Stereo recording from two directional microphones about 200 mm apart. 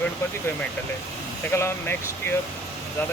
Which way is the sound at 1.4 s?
10° left (ahead or behind).